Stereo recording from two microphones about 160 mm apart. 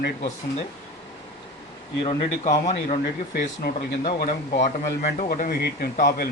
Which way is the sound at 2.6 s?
45° left (ahead or behind).